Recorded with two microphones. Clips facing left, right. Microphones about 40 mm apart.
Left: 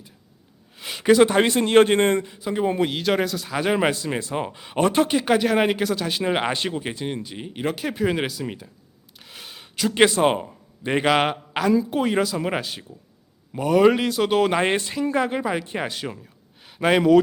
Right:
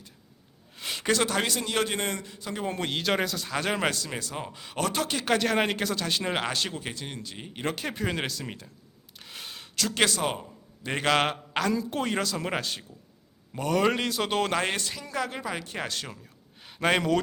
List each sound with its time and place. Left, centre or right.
0.8 s a sound: centre
1.3 s a man's voice: left
2.2 s speech: centre
2.9 s speech: centre
6.3 s speech: left
9.1 s a sound: centre; by 10.9 s left
10.9 s speech: centre
14.5 s speech: left
16.6 s a sound: centre